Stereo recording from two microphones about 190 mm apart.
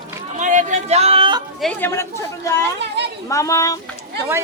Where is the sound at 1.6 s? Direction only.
10° left (ahead or behind).